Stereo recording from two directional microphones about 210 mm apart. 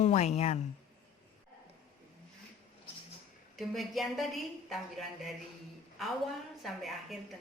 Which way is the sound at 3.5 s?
Centre (ahead or behind).